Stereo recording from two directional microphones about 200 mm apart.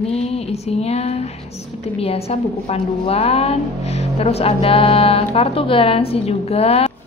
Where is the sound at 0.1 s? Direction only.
30° left (ahead or behind).